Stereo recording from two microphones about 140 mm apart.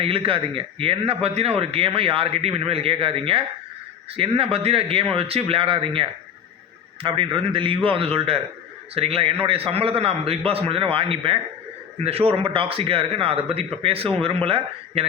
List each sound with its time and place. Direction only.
0.0 s a man's voice: 40° right (ahead or behind)